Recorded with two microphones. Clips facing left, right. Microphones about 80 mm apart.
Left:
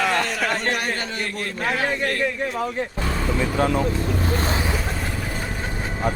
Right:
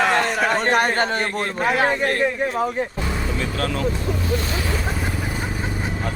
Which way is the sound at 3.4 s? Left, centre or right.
Centre.